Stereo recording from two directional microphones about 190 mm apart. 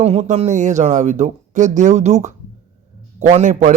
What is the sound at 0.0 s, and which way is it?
Speech, 35° right (ahead or behind).